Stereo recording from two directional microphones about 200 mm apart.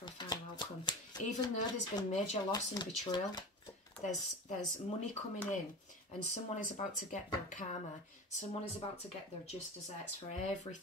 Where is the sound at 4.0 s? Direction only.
35° left (ahead or behind).